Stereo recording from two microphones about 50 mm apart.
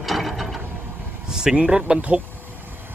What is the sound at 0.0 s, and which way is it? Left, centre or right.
Ratchet, centre.